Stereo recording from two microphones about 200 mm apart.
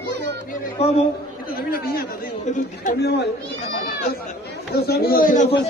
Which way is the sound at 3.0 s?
55° left (ahead or behind).